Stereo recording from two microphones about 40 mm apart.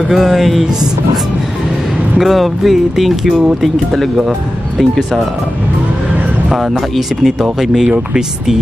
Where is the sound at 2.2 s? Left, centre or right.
Centre.